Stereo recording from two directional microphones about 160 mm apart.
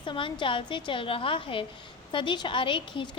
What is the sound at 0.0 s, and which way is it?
A woman's voice, 30° left (ahead or behind).